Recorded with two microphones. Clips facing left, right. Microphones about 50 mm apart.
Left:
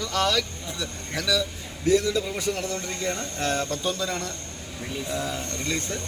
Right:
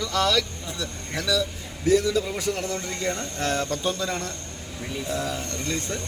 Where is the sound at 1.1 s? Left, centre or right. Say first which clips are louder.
Even; right.